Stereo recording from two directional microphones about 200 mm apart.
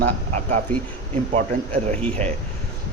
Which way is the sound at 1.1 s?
35° right (ahead or behind).